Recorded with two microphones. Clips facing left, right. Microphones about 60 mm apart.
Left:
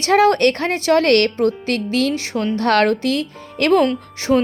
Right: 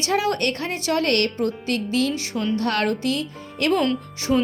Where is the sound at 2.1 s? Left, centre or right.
Left.